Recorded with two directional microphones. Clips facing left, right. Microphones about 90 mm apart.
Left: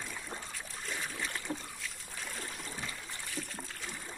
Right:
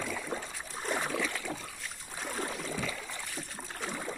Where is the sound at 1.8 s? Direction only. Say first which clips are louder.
Right 3 dB; 40° right (ahead or behind).